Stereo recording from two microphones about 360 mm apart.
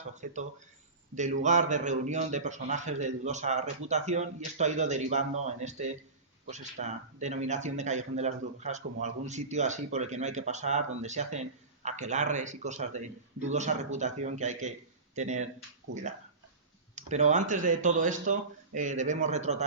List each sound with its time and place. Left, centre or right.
0.2 s speech: centre
16.9 s speech: centre